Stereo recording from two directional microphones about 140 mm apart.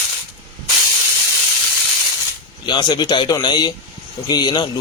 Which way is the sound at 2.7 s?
35° left (ahead or behind).